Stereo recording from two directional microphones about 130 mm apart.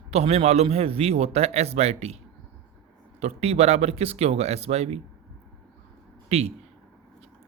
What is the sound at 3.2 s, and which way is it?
Speech, 55° right (ahead or behind).